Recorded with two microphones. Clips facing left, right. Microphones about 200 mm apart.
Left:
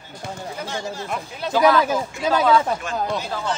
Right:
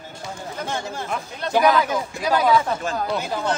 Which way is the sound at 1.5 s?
20° right (ahead or behind).